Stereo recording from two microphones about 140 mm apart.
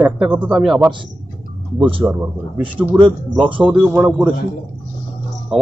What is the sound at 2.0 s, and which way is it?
Speech, 20° right (ahead or behind).